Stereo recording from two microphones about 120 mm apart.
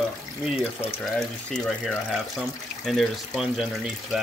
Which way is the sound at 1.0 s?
5° left (ahead or behind).